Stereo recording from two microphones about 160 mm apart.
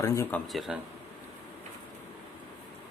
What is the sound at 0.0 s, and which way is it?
Speech, 20° left (ahead or behind).